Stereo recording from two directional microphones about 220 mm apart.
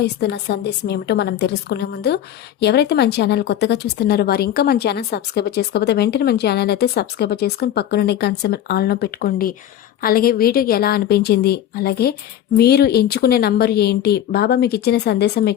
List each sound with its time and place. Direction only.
0.0 s a woman's voice: 50° left (ahead or behind)